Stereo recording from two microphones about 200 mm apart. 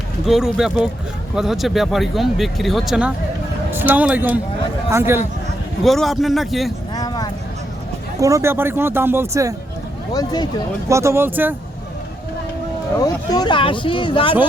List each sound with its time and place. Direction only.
0.3 s speech: centre (ahead or behind)
5.8 s speech: centre (ahead or behind)
6.9 s a sound: 20° left (ahead or behind)
8.2 s speech: 15° right (ahead or behind)
10.1 s speech: 20° left (ahead or behind)
10.8 s speech: 15° right (ahead or behind)
13.0 s speech: 20° left (ahead or behind)